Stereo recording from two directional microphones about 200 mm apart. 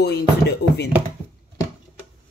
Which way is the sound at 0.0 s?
55° left (ahead or behind).